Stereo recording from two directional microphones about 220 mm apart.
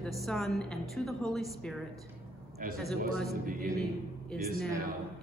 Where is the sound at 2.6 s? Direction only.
40° right (ahead or behind).